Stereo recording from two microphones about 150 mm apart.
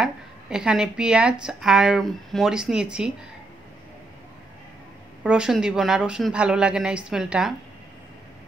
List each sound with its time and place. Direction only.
0.0 s a woman's voice: 5° right (ahead or behind)
5.2 s a woman's voice: 5° right (ahead or behind)